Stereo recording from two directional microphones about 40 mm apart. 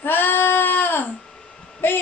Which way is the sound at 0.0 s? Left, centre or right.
Left.